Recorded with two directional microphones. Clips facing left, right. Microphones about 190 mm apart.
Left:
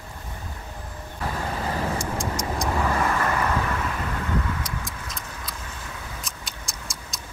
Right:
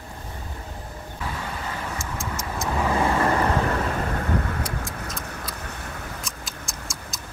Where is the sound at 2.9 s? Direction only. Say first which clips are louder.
Right 3 dB; 25° right (ahead or behind); by 5.8 s 65° right (ahead or behind).